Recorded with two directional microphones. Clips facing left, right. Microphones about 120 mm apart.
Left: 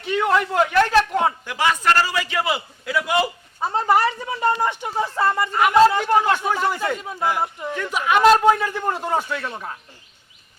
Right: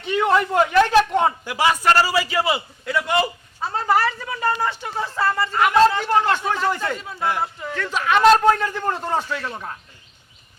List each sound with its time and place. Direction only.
0.1 s a man's voice: centre (ahead or behind)
3.6 s a sound: 20° left (ahead or behind)
7.0 s a man's voice: 15° left (ahead or behind); by 9.7 s centre (ahead or behind)